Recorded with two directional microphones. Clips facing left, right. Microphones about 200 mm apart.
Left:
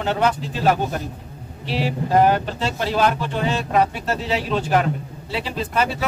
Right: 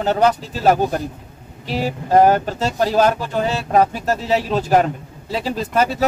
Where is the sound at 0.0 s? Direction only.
40° right (ahead or behind).